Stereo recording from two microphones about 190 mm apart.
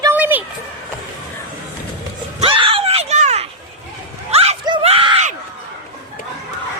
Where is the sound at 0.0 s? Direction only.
10° right (ahead or behind).